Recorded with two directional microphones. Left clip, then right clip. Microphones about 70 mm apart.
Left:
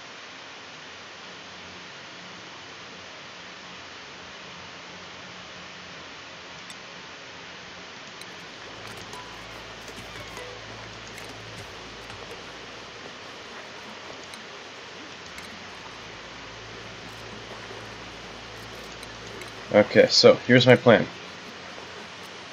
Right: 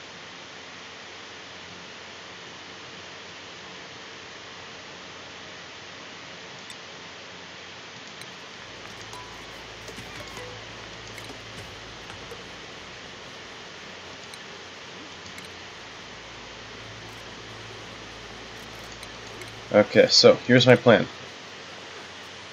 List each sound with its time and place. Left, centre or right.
19.7 s speech: centre